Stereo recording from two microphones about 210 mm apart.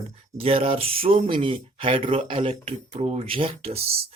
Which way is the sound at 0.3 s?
25° right (ahead or behind).